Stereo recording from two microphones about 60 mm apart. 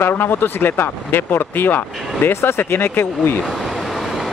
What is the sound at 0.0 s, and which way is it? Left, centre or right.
Speech, left.